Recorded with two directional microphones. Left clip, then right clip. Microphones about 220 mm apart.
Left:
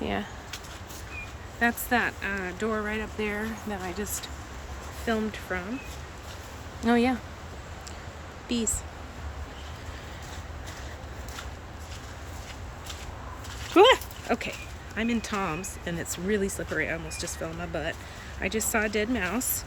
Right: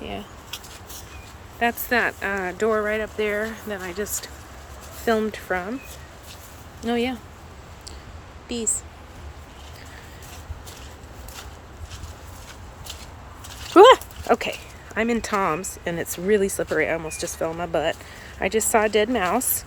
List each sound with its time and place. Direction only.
0.0 s a sound: 10° left (ahead or behind)
1.5 s speech: 10° right (ahead or behind)
6.8 s speech: centre (ahead or behind)
8.4 s speech: centre (ahead or behind)
13.7 s a sound: 25° right (ahead or behind)
14.9 s speech: 20° right (ahead or behind)